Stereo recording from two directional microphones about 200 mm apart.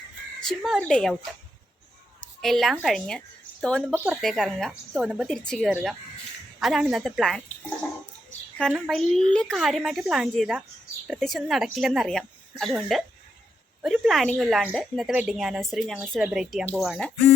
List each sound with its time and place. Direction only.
0.4 s a woman's voice: centre (ahead or behind)
2.4 s speech: centre (ahead or behind)
3.9 s a woman's voice: 10° right (ahead or behind)
8.5 s a woman's voice: centre (ahead or behind)